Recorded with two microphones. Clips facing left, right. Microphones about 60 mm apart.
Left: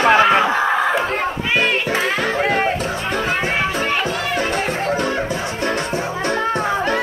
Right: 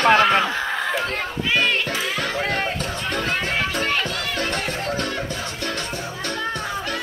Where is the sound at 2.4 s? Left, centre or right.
Centre.